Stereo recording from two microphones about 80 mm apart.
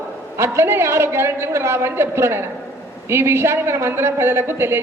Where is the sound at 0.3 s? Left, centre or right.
Right.